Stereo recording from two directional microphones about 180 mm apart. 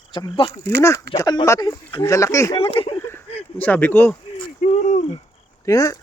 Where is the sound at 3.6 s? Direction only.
10° left (ahead or behind).